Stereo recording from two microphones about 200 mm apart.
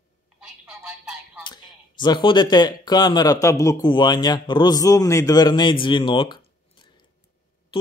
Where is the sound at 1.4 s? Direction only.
20° left (ahead or behind).